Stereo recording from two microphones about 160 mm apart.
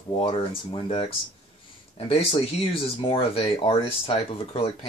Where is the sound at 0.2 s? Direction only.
35° left (ahead or behind).